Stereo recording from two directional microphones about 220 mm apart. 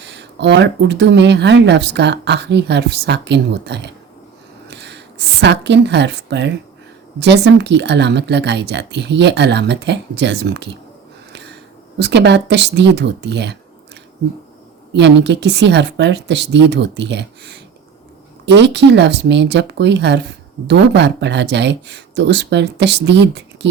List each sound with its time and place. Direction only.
0.0 s speech: 50° right (ahead or behind)
4.7 s a sound: 50° right (ahead or behind)
7.2 s speech: 50° right (ahead or behind)
11.3 s a sound: 50° right (ahead or behind)
11.9 s speech: 50° right (ahead or behind)
14.9 s speech: 50° right (ahead or behind)